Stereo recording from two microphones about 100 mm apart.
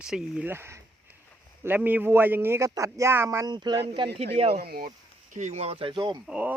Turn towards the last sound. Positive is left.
turn(degrees=-15)  # may be behind; listen again after turning